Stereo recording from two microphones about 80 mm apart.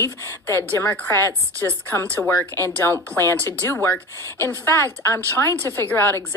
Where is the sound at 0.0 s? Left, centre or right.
Left.